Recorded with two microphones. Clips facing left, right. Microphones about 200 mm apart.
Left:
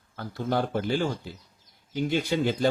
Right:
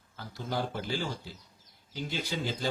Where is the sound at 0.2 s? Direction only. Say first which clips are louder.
Left 7 dB; 60° left (ahead or behind).